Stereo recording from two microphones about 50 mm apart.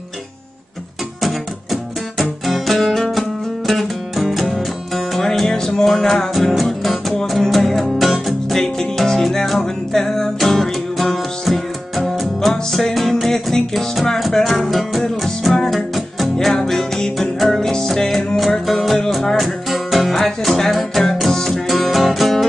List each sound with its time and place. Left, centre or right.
1.2 s music: centre